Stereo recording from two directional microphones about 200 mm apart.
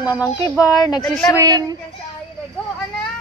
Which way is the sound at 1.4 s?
20° right (ahead or behind).